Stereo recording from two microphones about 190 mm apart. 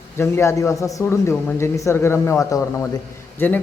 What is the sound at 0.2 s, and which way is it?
A man's voice, 15° left (ahead or behind).